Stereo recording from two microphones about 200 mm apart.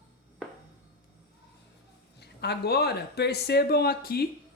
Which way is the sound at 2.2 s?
55° left (ahead or behind).